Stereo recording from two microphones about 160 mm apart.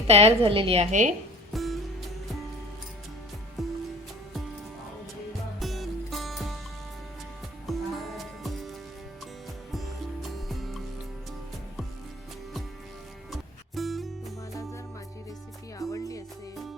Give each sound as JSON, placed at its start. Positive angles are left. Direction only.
{"t": 0.1, "sound": "a woman's voice", "side_deg": -40}
{"t": 1.5, "sound": "music", "side_deg": 0}
{"t": 3.6, "sound": "music", "side_deg": 0}
{"t": 5.5, "sound": "music", "side_deg": 0}
{"t": 7.7, "sound": "music", "side_deg": 0}
{"t": 9.7, "sound": "music", "side_deg": 0}
{"t": 13.3, "sound": "music", "side_deg": 0}
{"t": 15.8, "sound": "music", "side_deg": 20}